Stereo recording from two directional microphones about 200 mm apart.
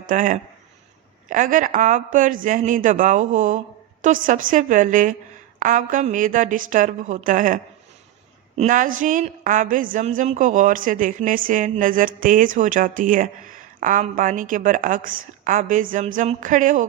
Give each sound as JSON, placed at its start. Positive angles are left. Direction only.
{"t": 0.0, "sound": "a woman's voice", "side_deg": -40}